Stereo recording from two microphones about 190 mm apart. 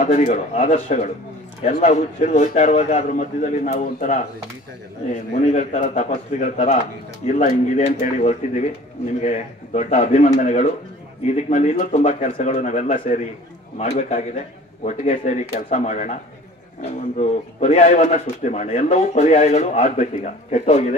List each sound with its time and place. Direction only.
0.0 s a man's voice: 40° left (ahead or behind)
5.5 s a man's voice: 40° left (ahead or behind)
17.2 s a man's voice: 40° left (ahead or behind)